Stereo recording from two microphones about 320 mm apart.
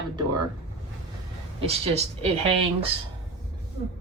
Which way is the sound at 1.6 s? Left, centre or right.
Centre.